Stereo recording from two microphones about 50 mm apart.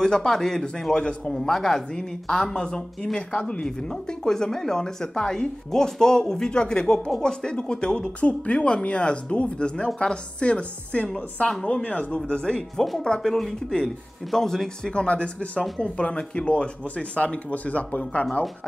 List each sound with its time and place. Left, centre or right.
0.0 s speech: centre
0.9 s speech: centre
3.6 s speech: centre
13.3 s speech: centre
15.0 s speech: left